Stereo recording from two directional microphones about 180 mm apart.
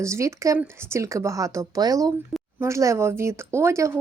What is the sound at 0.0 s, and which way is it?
Speech, 15° right (ahead or behind).